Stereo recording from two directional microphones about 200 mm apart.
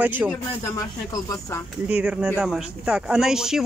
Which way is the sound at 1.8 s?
5° right (ahead or behind).